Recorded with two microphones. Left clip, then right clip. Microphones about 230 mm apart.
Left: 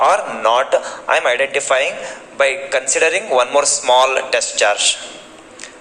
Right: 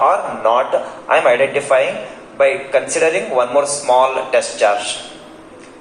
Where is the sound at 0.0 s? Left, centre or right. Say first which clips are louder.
Even; left.